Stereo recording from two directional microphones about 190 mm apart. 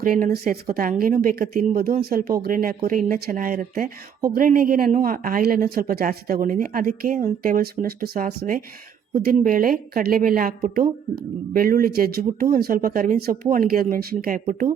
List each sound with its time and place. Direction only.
0.0 s a woman's voice: 50° right (ahead or behind)